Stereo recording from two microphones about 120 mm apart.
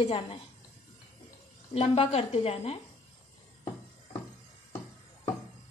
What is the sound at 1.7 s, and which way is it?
A woman's voice, 55° left (ahead or behind).